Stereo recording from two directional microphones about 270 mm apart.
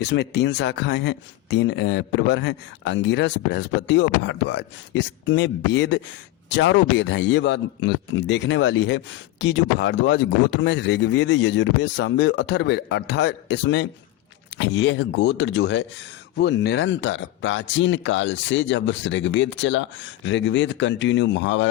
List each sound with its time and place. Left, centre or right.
0.0 s speech: left